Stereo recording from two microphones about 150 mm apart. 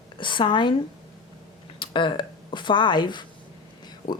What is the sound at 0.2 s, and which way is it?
Speech, 35° left (ahead or behind).